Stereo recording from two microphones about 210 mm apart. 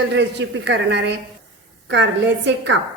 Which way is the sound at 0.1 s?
55° right (ahead or behind).